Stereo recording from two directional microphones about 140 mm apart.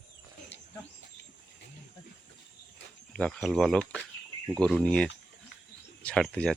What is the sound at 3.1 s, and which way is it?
Speech, 5° left (ahead or behind).